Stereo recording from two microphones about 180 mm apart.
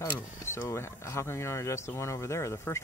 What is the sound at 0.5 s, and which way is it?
Speech, 15° left (ahead or behind).